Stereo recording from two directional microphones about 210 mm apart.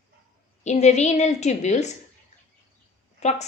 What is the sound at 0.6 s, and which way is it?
A woman's voice, 35° left (ahead or behind).